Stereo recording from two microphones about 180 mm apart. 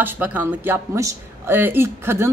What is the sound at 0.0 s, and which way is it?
Speech, 10° right (ahead or behind).